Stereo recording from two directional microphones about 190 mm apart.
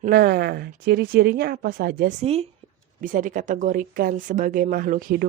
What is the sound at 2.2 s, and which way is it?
Speech, 30° right (ahead or behind).